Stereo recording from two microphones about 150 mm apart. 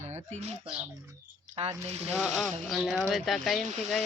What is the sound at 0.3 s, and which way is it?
Speech, 45° right (ahead or behind).